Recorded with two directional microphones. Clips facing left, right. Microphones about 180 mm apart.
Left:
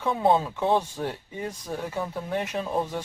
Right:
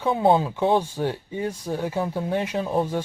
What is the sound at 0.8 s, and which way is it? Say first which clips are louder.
Speech: right 4 dB; 10° right (ahead or behind).